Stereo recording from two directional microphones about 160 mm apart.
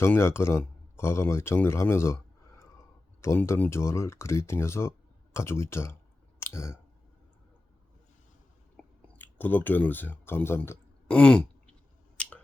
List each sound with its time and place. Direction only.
0.0 s speech: 15° left (ahead or behind)
6.4 s clicking: 15° left (ahead or behind)
8.7 s a sound: 10° left (ahead or behind)